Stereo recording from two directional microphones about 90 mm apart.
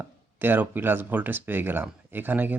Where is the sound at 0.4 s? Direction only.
20° right (ahead or behind).